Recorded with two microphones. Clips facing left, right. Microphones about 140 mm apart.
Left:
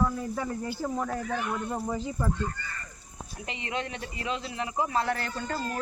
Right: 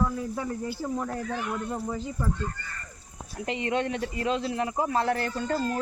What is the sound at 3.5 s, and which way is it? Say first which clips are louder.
Speech: right 7 dB; 45° right (ahead or behind).